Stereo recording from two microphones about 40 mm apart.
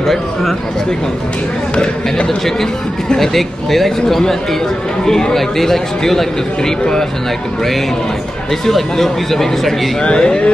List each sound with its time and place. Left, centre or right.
0.0 s speech: centre
2.2 s speech: centre
8.6 s speech: centre
10.0 s speech: left